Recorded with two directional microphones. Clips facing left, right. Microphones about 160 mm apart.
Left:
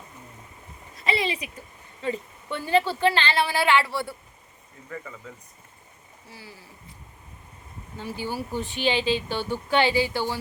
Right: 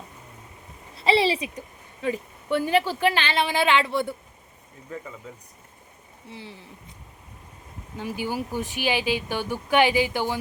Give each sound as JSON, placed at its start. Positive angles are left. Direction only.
{"t": 0.9, "sound": "a sound", "side_deg": -30}
{"t": 1.5, "sound": "speech", "side_deg": -15}
{"t": 6.2, "sound": "speech", "side_deg": -25}
{"t": 7.9, "sound": "speech", "side_deg": -15}